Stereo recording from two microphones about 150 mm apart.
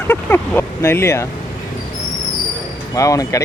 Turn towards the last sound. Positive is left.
turn(degrees=20)  # may be behind; listen again after turning